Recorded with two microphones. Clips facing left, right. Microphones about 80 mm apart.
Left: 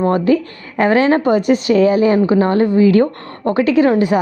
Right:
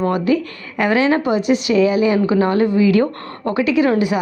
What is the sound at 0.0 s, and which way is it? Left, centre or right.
A woman's voice, left.